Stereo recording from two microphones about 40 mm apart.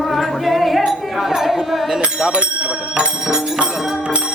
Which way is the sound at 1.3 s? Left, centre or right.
Centre.